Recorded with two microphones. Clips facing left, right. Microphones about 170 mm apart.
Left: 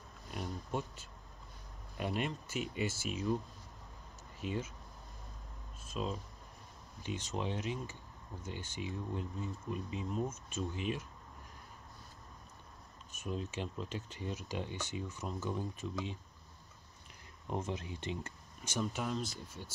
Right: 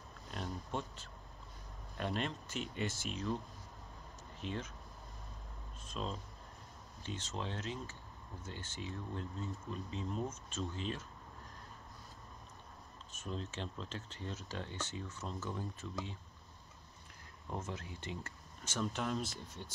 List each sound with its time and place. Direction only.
0.3 s speech: 10° left (ahead or behind)
4.4 s speech: 5° left (ahead or behind)
5.9 s speech: 5° left (ahead or behind)
13.1 s speech: 10° left (ahead or behind)
17.5 s speech: 15° left (ahead or behind)
19.0 s speech: centre (ahead or behind)